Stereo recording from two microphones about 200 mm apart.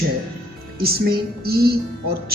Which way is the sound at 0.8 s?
50° right (ahead or behind).